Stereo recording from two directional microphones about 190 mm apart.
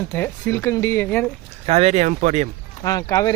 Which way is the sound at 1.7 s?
35° right (ahead or behind).